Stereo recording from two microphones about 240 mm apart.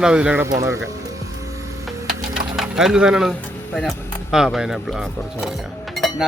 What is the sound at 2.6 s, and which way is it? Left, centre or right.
Speech, centre.